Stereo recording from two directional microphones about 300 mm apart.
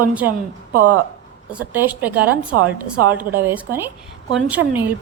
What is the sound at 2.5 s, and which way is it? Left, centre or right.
Speech, right.